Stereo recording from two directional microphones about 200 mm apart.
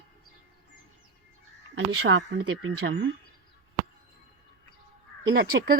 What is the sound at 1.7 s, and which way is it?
Speech, 75° right (ahead or behind).